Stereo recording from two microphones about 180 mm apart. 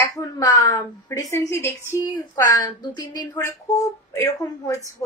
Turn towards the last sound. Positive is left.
turn(degrees=15)  # may be behind; listen again after turning